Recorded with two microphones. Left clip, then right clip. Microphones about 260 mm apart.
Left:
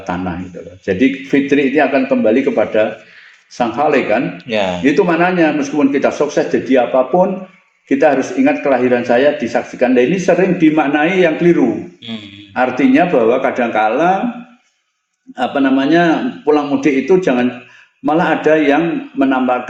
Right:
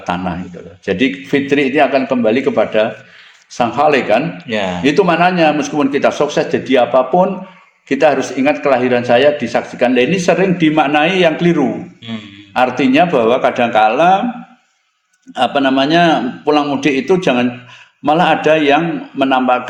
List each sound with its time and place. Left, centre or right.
0.0 s speech: right
4.4 s speech: centre
4.9 s speech: right
12.1 s a sound: centre
12.5 s speech: right
15.4 s speech: right